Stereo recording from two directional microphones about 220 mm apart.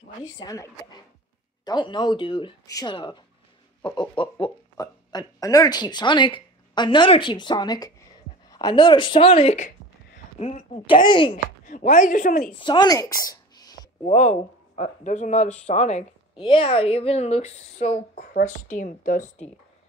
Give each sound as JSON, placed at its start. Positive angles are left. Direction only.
{"t": 0.4, "sound": "a woman's voice", "side_deg": 15}
{"t": 11.6, "sound": "speech", "side_deg": 40}
{"t": 12.5, "sound": "speech", "side_deg": 20}
{"t": 14.0, "sound": "a woman's voice", "side_deg": 30}